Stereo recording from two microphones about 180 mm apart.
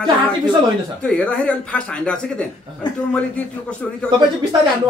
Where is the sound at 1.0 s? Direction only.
5° left (ahead or behind).